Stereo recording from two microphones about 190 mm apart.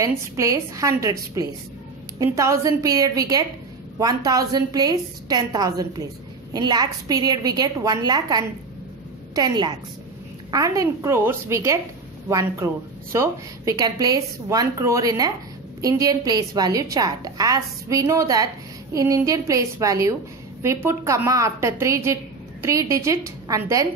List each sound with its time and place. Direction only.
0.0 s a woman's voice: 15° right (ahead or behind)